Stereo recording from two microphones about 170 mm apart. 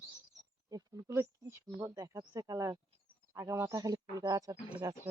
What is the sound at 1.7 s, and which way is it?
Speech, 20° right (ahead or behind).